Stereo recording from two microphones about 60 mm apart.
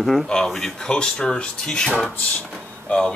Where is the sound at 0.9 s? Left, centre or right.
Centre.